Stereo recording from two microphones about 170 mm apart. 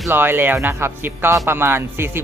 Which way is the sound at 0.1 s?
15° right (ahead or behind).